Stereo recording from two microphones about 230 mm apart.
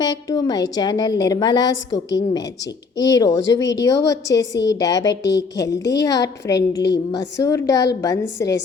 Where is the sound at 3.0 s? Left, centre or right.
Centre.